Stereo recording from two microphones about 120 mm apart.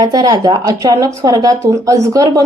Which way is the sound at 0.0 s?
35° right (ahead or behind).